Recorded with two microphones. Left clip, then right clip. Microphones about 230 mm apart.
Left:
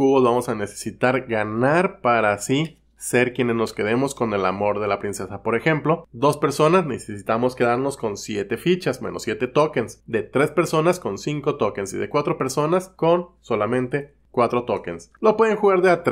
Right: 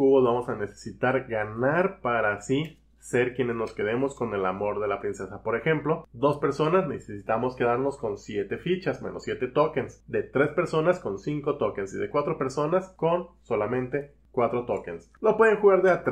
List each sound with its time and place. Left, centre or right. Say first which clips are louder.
0.0 s speech: left 4 dB; left